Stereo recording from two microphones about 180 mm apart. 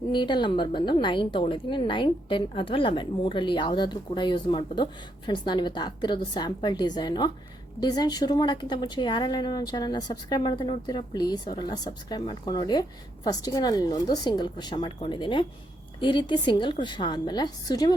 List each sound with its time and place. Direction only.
0.1 s a woman's voice: 25° left (ahead or behind)